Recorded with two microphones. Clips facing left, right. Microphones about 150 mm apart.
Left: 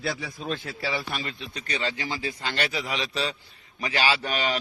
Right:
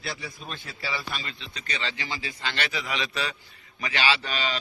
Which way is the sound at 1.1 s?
50° left (ahead or behind).